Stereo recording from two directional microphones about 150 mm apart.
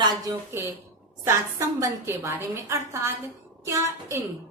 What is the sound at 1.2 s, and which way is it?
A woman's voice, 20° right (ahead or behind).